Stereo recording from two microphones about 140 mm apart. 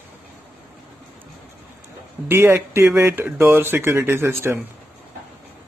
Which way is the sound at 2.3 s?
15° right (ahead or behind).